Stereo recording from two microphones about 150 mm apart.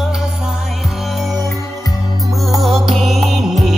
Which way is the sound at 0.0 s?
Centre (ahead or behind).